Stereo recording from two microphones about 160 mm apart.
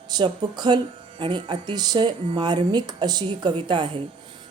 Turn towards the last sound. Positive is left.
turn(degrees=-30)  # may be behind; listen again after turning